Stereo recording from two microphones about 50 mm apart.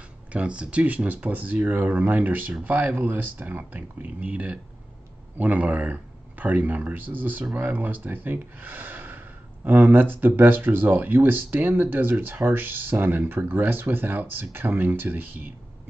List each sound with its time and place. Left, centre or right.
0.3 s speech: right